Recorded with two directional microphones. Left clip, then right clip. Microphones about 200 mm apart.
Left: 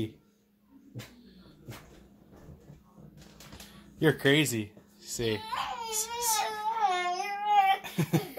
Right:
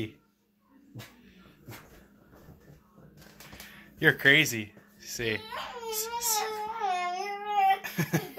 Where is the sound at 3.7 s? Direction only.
25° left (ahead or behind).